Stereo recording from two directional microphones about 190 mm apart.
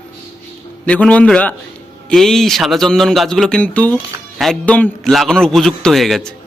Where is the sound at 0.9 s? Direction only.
5° left (ahead or behind).